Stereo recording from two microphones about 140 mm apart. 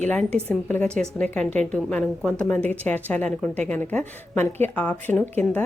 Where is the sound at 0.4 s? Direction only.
10° left (ahead or behind).